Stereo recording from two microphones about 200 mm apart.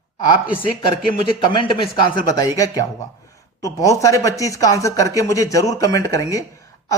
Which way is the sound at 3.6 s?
15° left (ahead or behind).